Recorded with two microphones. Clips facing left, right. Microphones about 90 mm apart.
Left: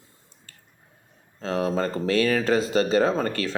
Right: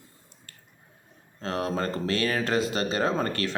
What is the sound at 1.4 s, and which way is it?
Speech, 40° right (ahead or behind).